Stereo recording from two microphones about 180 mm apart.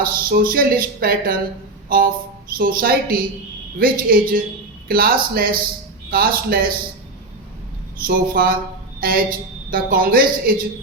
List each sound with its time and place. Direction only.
0.0 s speech: 55° right (ahead or behind)
1.9 s music: 55° right (ahead or behind)
2.6 s a woman's voice: 50° right (ahead or behind)
8.0 s a woman's voice: 55° right (ahead or behind)